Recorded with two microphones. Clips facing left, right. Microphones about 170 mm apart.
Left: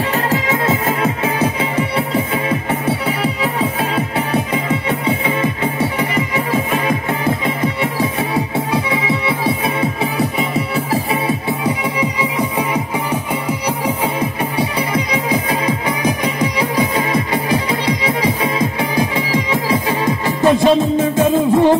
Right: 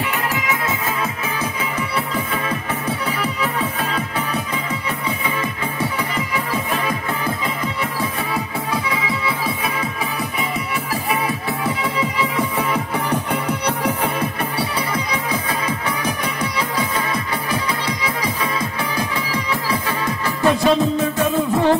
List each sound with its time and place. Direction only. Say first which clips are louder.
0.1 s music: left 6 dB; 30° left (ahead or behind)
4.8 s music: left 7 dB; 25° left (ahead or behind)